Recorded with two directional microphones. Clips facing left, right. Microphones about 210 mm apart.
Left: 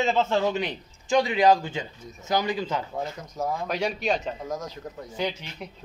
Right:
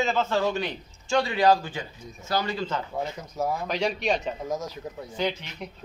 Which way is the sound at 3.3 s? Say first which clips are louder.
Even; centre (ahead or behind).